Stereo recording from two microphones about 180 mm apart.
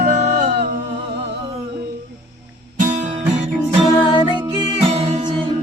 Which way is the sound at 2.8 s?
40° right (ahead or behind).